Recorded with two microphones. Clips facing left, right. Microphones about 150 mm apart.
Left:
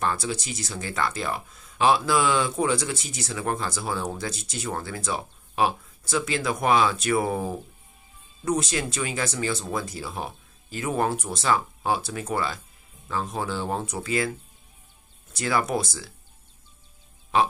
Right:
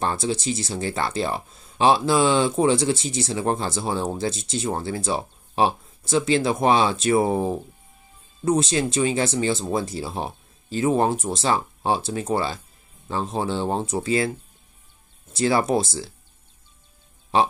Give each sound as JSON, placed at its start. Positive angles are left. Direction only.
{"t": 0.0, "sound": "speech", "side_deg": -25}
{"t": 15.3, "sound": "speech", "side_deg": -30}
{"t": 17.3, "sound": "speech", "side_deg": -30}